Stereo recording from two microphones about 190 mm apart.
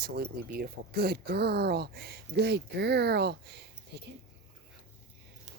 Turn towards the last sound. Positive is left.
turn(degrees=-60)  # may be behind; listen again after turning